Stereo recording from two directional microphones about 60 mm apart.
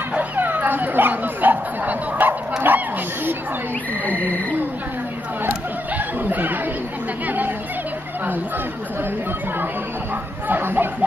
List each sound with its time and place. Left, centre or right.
0.1 s dog: right
2.7 s a sound: right
4.0 s wild animals: left
5.5 s a sound: right
7.2 s speech: right
10.5 s speech: right